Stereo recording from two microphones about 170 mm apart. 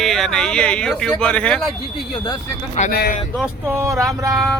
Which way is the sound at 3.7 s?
15° right (ahead or behind).